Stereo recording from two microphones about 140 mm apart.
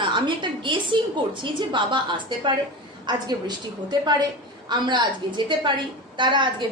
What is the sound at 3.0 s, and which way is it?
A woman's voice, 30° right (ahead or behind).